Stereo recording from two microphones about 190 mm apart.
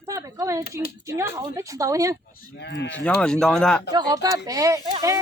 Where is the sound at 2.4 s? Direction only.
55° left (ahead or behind).